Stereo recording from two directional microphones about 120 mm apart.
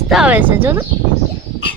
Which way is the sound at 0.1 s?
10° right (ahead or behind).